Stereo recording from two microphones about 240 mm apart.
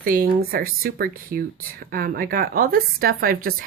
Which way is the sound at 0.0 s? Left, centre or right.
Right.